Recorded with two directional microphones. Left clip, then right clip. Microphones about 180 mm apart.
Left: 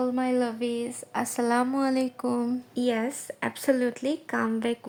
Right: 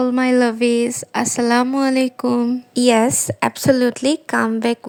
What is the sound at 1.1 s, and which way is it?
Speech, 25° right (ahead or behind).